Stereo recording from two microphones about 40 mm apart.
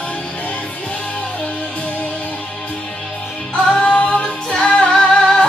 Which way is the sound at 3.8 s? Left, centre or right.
Left.